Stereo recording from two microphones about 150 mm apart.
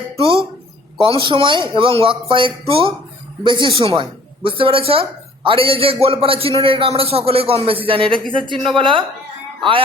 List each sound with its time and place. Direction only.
1.0 s speech: 35° right (ahead or behind)
8.5 s a woman's voice: centre (ahead or behind)
8.8 s speech: 35° right (ahead or behind)